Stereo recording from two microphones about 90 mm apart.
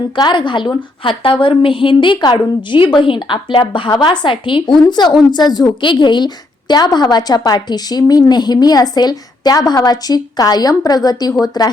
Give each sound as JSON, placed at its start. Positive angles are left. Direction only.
{"t": 0.2, "sound": "a woman's voice", "side_deg": 60}
{"t": 1.0, "sound": "a woman's voice", "side_deg": 75}
{"t": 2.1, "sound": "a woman's voice", "side_deg": 55}